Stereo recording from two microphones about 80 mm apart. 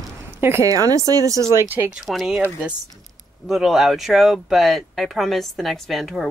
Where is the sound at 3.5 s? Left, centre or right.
Centre.